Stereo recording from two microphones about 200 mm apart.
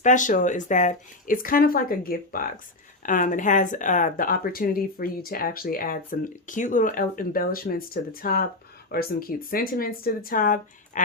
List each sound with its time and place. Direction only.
0.0 s speech: 40° left (ahead or behind)